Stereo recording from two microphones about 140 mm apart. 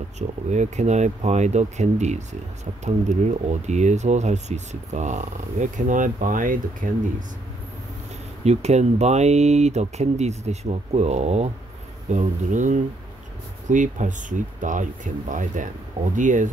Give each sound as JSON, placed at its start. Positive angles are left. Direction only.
{"t": 0.5, "sound": "speech", "side_deg": -55}
{"t": 8.5, "sound": "speech", "side_deg": -50}